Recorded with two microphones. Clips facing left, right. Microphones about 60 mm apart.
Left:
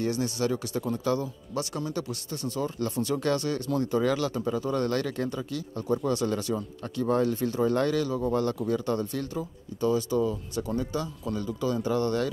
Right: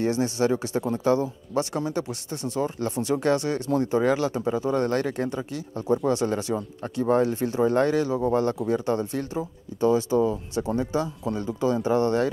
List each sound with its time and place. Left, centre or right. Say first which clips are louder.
0.0 s speech: right 4 dB; right